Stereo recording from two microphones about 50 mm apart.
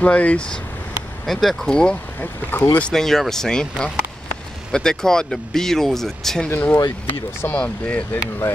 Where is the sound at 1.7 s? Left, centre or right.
Centre.